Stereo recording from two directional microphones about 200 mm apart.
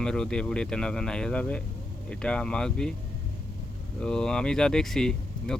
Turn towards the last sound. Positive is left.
turn(degrees=0)  # may be behind; listen again after turning